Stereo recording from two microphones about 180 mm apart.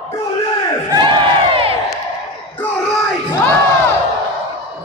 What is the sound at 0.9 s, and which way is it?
Crowd, 25° right (ahead or behind).